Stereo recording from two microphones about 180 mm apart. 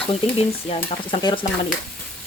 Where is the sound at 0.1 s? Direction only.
35° left (ahead or behind).